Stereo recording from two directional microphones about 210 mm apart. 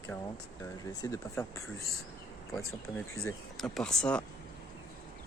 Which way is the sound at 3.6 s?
5° left (ahead or behind).